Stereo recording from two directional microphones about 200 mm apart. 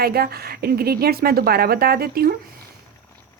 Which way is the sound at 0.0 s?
50° right (ahead or behind).